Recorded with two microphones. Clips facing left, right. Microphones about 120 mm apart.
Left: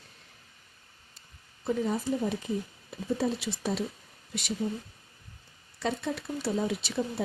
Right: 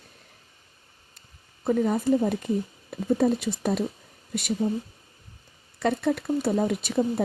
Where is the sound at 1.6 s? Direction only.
55° right (ahead or behind).